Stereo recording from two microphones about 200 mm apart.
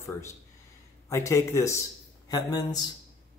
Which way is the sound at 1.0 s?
15° left (ahead or behind).